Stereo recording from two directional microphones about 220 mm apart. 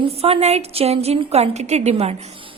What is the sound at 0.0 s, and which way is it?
A woman's voice, 25° right (ahead or behind).